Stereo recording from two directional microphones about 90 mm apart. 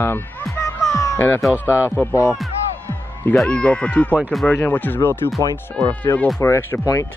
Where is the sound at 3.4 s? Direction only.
10° left (ahead or behind); by 6.8 s 30° left (ahead or behind).